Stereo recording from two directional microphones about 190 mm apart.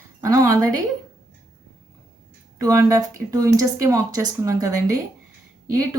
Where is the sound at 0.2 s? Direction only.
15° right (ahead or behind).